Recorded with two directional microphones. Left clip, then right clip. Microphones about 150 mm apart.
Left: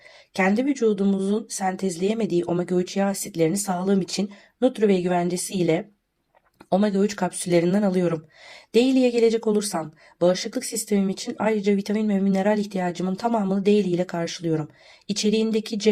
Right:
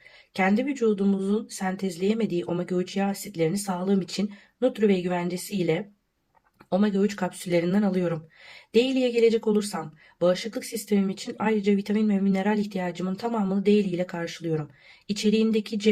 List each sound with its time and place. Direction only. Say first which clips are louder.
0.8 s speech: left 2 dB; 35° left (ahead or behind)